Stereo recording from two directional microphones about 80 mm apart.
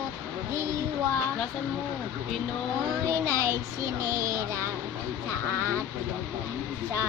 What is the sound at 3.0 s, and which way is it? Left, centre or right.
Speech, right.